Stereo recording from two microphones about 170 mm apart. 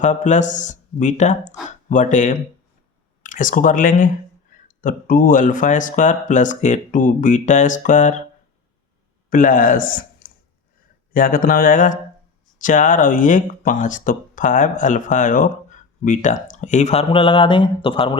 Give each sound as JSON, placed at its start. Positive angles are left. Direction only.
{"t": 0.0, "sound": "speech", "side_deg": 45}
{"t": 9.3, "sound": "speech", "side_deg": 50}
{"t": 11.1, "sound": "mantra", "side_deg": 55}
{"t": 12.5, "sound": "speech", "side_deg": 50}